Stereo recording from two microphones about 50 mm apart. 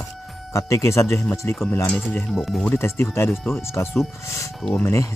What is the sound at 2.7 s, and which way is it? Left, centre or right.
Speech, left.